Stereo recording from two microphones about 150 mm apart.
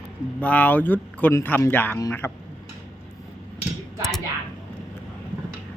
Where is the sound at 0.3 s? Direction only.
10° left (ahead or behind).